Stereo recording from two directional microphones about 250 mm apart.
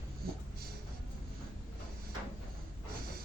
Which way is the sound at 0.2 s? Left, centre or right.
Right.